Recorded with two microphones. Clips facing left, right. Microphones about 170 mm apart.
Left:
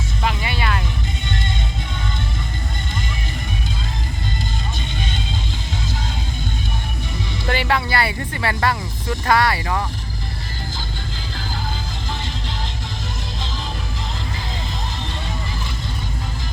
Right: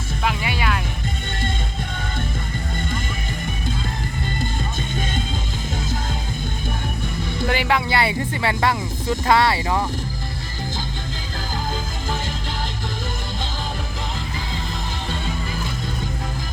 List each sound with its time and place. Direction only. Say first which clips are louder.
0.3 s vehicle: even; 10° right (ahead or behind)
7.5 s speech: left 1 dB; 15° right (ahead or behind)